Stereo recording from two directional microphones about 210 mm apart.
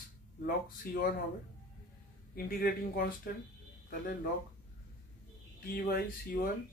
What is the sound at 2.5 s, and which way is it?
Speech, 45° left (ahead or behind).